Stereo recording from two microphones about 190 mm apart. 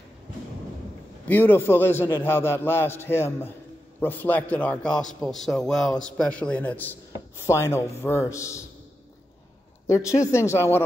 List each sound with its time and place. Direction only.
1.2 s a man's voice: 10° left (ahead or behind)
9.8 s a man's voice: 15° left (ahead or behind)